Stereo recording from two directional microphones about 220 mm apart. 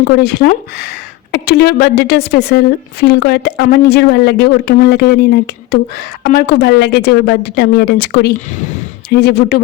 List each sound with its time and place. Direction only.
0.2 s speech: 45° left (ahead or behind)